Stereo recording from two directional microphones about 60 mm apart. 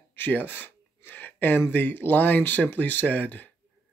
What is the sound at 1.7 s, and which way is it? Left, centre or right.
Speech, left.